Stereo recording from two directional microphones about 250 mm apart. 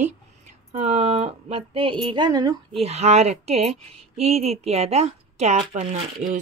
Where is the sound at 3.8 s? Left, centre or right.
Right.